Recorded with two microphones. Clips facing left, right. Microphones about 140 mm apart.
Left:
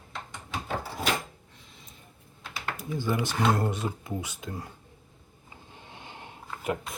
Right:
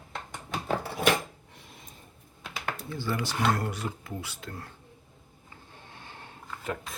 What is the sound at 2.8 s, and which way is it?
Speech, 15° left (ahead or behind).